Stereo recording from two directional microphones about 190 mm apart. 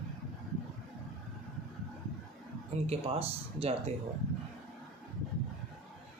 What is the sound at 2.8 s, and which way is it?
Speech, 30° right (ahead or behind).